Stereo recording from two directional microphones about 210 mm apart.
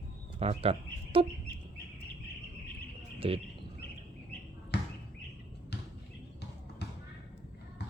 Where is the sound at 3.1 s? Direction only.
25° right (ahead or behind).